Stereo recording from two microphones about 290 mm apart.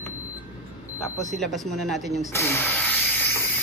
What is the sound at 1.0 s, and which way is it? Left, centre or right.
Speech, centre.